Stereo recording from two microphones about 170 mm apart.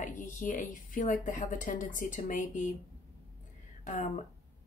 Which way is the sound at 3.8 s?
45° left (ahead or behind).